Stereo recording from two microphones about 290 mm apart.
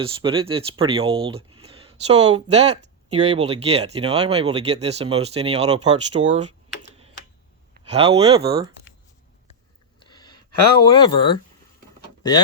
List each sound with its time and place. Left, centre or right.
0.0 s speech: centre
7.7 s speech: right
10.0 s a sound: centre